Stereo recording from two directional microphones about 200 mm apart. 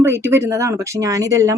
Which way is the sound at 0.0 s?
10° right (ahead or behind).